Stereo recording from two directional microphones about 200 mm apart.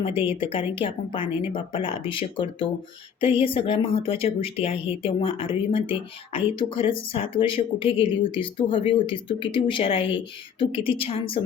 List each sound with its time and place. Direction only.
0.2 s speech: 25° left (ahead or behind)